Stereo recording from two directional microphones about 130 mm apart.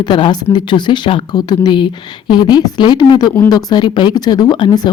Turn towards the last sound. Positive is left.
turn(degrees=35)  # may be behind; listen again after turning